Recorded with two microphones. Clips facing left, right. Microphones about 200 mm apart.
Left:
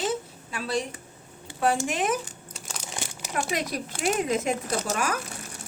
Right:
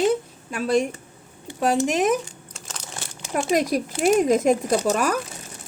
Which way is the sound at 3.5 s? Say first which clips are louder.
Right 9 dB; 45° right (ahead or behind).